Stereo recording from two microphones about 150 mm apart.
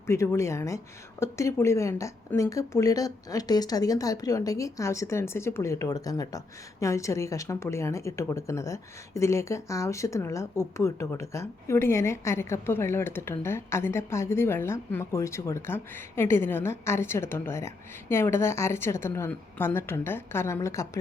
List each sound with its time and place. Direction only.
0.1 s a woman's voice: 20° left (ahead or behind)